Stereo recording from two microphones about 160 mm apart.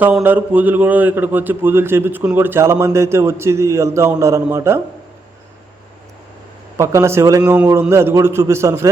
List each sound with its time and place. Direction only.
0.0 s a man's voice: 10° right (ahead or behind)
6.7 s a man's voice: 20° right (ahead or behind)